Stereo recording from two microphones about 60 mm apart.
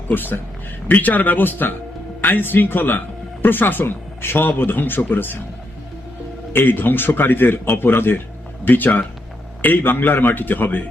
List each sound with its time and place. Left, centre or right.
0.1 s speech: left
6.5 s speech: left